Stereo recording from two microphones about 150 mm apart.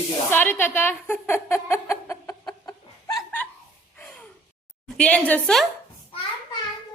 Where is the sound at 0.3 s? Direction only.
15° left (ahead or behind).